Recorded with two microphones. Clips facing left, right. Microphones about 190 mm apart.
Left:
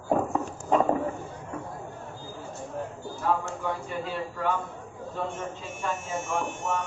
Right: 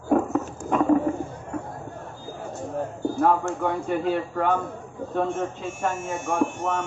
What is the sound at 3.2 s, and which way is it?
Speech, 55° right (ahead or behind).